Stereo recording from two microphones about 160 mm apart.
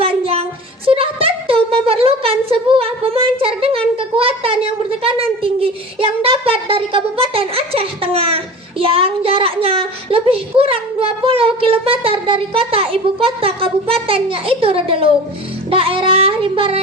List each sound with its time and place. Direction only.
0.0 s child singing: 35° right (ahead or behind)
0.9 s a sound: 35° right (ahead or behind)
8.8 s a child's voice: 35° right (ahead or behind)
15.7 s child singing: 35° right (ahead or behind)